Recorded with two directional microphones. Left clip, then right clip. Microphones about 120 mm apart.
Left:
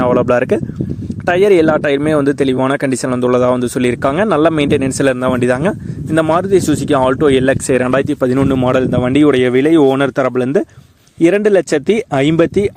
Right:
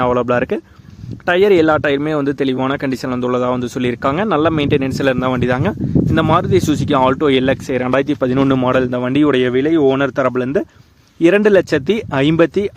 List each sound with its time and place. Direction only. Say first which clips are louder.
0.0 s speech: left 3 dB; 30° left (ahead or behind)
6.2 s speech: left 3 dB; 15° left (ahead or behind)
8.3 s a man's voice: left 1 dB; centre (ahead or behind)
8.7 s speech: left 2 dB; 30° left (ahead or behind)
9.5 s speech: left 3 dB; 65° left (ahead or behind)
9.9 s speech: left 2 dB; 45° left (ahead or behind)
10.2 s speech: left 2 dB; 30° left (ahead or behind)